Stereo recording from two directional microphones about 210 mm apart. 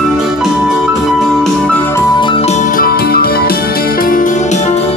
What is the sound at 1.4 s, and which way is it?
Music, 5° left (ahead or behind).